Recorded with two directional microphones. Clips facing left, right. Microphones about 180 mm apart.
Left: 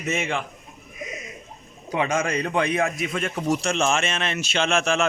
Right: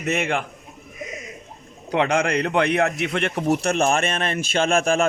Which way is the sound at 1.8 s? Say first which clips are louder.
Right 3 dB; 65° right (ahead or behind).